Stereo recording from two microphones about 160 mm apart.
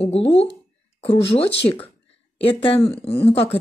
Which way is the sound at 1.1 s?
35° left (ahead or behind).